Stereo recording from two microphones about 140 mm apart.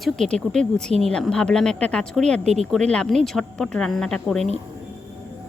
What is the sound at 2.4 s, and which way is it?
Speech, 55° right (ahead or behind).